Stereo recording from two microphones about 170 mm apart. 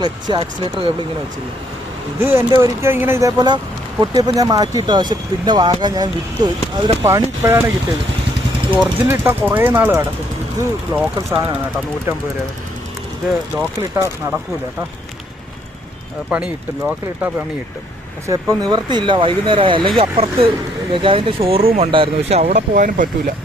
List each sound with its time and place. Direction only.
0.0 s speech: 25° right (ahead or behind)
2.1 s speech: 15° right (ahead or behind)
8.7 s speech: 10° right (ahead or behind)
13.9 s speech: 15° right (ahead or behind)
16.3 s speech: 10° right (ahead or behind)
18.3 s speech: 20° right (ahead or behind); by 23.3 s 50° right (ahead or behind)